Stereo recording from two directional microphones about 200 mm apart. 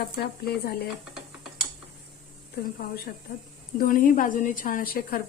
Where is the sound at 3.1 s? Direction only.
45° left (ahead or behind).